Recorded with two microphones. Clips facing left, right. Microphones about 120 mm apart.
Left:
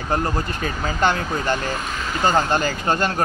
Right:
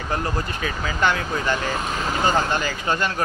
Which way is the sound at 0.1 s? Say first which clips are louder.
Left 3 dB; 35° left (ahead or behind).